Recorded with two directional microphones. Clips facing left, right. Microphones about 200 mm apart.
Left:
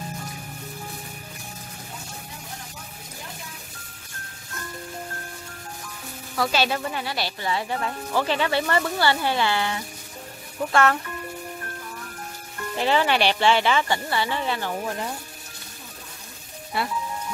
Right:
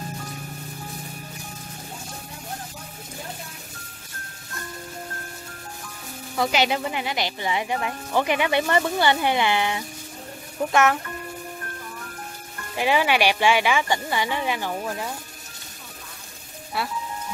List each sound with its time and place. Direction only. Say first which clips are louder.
6.3 s speech: right 1 dB; 20° right (ahead or behind)
12.7 s speech: even; 10° right (ahead or behind)
16.7 s speech: left 1 dB; centre (ahead or behind)